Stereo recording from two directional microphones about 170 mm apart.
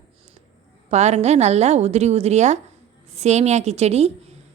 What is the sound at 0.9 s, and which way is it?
A woman's voice, 40° right (ahead or behind).